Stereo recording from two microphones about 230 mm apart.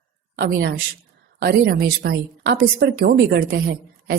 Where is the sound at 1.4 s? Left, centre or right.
Right.